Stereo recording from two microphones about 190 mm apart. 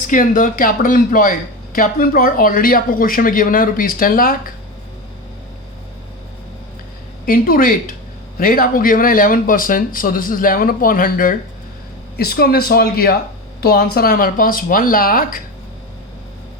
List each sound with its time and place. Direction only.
0.1 s speech: 45° left (ahead or behind)
7.3 s speech: 50° left (ahead or behind)